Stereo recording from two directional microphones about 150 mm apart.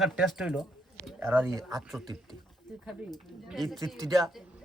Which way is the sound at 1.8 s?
Centre (ahead or behind).